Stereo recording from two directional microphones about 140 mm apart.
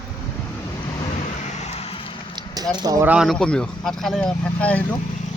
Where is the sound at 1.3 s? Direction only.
55° left (ahead or behind); by 2.2 s 40° left (ahead or behind).